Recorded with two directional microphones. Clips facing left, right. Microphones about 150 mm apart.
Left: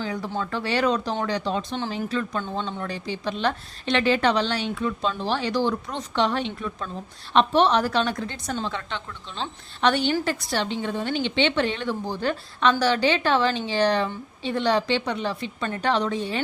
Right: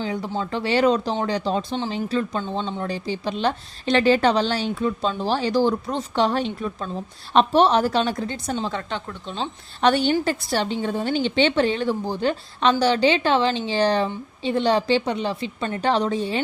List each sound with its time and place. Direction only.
0.0 s a woman's voice: 25° right (ahead or behind)
8.6 s a woman's voice: 40° right (ahead or behind)